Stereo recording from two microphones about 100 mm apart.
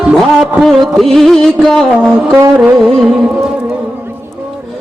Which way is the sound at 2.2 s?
15° right (ahead or behind).